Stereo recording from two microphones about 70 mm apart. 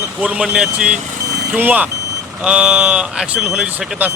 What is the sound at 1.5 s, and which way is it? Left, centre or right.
Speech, right.